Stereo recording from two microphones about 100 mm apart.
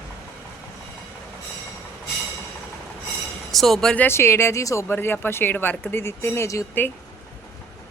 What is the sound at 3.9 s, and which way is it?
Speech, 25° left (ahead or behind).